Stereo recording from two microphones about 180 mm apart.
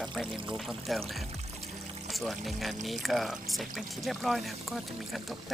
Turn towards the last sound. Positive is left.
turn(degrees=0)  # may be behind; listen again after turning